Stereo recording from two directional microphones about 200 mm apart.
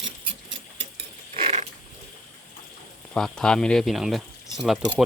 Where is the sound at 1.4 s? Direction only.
30° right (ahead or behind).